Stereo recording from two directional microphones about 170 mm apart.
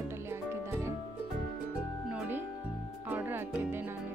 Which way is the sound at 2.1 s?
10° right (ahead or behind).